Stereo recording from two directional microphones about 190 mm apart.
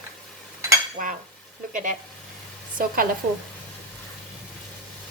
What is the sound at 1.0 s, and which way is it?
Speech, 45° right (ahead or behind).